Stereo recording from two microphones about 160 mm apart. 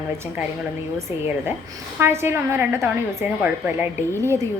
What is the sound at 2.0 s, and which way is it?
A woman's voice, 15° right (ahead or behind).